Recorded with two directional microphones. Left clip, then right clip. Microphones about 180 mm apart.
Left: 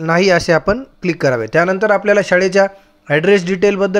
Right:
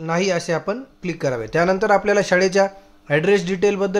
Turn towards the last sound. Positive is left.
turn(degrees=25)  # may be behind; listen again after turning